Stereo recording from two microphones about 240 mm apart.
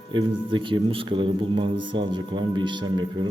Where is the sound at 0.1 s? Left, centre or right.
Centre.